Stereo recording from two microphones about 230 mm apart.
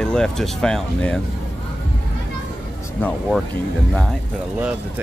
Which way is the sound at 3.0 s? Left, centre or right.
Centre.